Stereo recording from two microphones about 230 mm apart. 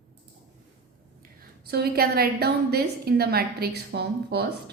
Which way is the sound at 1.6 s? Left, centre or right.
Right.